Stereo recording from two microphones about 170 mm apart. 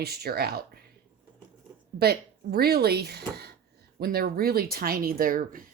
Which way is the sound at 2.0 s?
65° right (ahead or behind).